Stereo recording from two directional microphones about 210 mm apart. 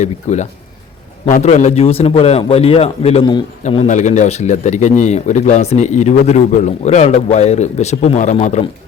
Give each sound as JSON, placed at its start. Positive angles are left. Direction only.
{"t": 0.0, "sound": "a man's voice", "side_deg": 35}